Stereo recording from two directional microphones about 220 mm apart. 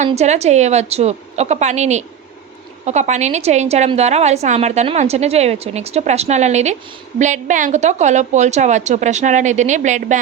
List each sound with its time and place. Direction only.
0.0 s a woman's voice: 30° right (ahead or behind)